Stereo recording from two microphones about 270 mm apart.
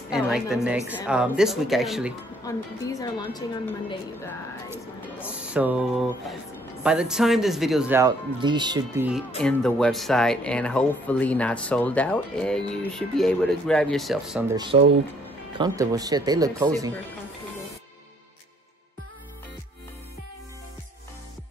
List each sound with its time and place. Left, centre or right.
0.1 s speech: centre
2.4 s speech: centre
5.2 s speech: centre
8.0 s speech: centre
9.4 s speech: centre
14.5 s speech: centre